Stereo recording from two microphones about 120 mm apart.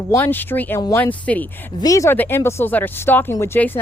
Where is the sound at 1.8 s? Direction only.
30° left (ahead or behind).